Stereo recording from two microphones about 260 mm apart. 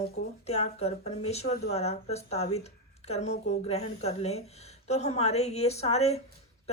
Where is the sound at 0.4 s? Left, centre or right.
Left.